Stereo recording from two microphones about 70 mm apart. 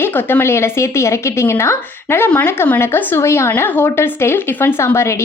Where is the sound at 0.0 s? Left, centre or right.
Left.